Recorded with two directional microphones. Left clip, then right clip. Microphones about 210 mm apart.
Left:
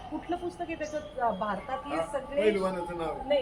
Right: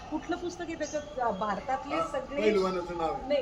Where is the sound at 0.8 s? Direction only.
15° right (ahead or behind).